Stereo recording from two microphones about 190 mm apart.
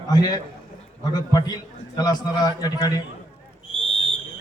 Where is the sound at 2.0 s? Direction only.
20° left (ahead or behind).